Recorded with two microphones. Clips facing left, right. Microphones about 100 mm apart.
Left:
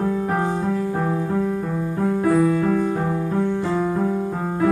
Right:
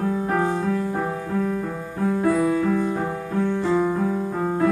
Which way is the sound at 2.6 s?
45° left (ahead or behind).